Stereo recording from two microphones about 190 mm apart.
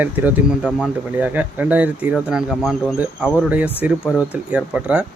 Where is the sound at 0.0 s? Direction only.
10° right (ahead or behind).